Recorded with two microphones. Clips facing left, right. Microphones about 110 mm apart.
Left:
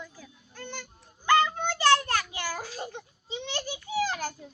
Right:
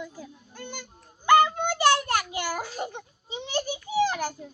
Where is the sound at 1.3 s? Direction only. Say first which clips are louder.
Right 5 dB; 15° right (ahead or behind).